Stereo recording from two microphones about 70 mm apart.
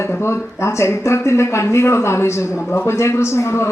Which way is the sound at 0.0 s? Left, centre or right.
Left.